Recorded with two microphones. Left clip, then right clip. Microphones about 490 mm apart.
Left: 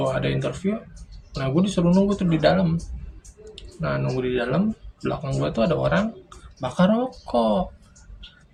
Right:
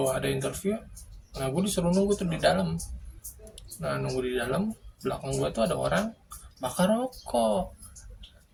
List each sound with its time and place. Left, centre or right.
0.1 s speech: right